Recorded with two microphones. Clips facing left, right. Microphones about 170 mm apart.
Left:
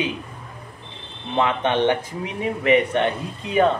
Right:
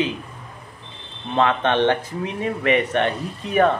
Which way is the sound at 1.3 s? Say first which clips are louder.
Right 1 dB; 15° left (ahead or behind).